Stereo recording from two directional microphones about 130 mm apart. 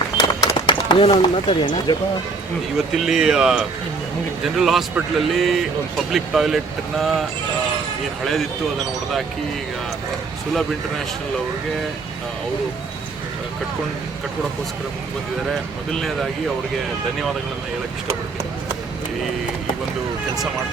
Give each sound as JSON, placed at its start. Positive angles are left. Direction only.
{"t": 0.2, "sound": "a sound", "side_deg": 40}
{"t": 2.9, "sound": "a man's voice", "side_deg": -5}
{"t": 10.5, "sound": "a man's voice", "side_deg": 0}
{"t": 15.9, "sound": "a man's voice", "side_deg": 5}